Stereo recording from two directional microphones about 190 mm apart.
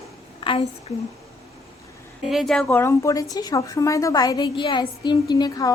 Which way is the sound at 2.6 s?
15° left (ahead or behind).